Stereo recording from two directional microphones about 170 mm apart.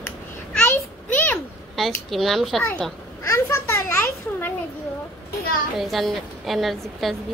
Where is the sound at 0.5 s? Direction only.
10° left (ahead or behind).